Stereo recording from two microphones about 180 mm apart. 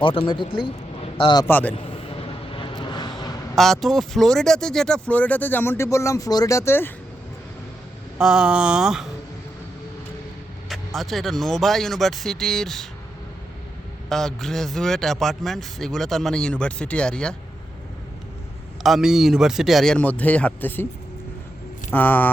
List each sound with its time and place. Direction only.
0.0 s speech: 30° left (ahead or behind)
1.5 s speech: 10° left (ahead or behind)
1.7 s vehicle: 30° left (ahead or behind)
3.5 s speech: centre (ahead or behind)
8.2 s a man's voice: 5° right (ahead or behind)
10.7 s a man's voice: centre (ahead or behind)
14.1 s a man's voice: centre (ahead or behind)
18.8 s a man's voice: centre (ahead or behind)
21.9 s speech: 10° left (ahead or behind)